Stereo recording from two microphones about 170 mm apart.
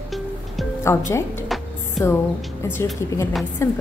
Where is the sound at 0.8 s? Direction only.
15° left (ahead or behind).